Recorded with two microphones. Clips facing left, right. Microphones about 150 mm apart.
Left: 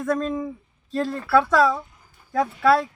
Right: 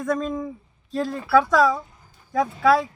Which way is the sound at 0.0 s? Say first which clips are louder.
Left 1 dB; centre (ahead or behind).